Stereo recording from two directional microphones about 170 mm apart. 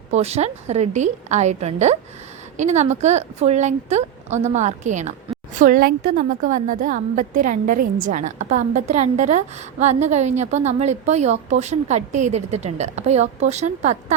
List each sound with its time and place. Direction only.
0.1 s a woman's voice: 40° right (ahead or behind)